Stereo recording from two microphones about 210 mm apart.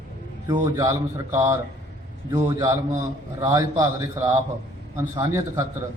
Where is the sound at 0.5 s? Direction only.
15° right (ahead or behind).